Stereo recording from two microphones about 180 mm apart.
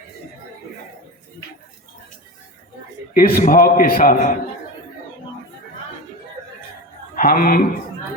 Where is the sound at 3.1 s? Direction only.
50° left (ahead or behind).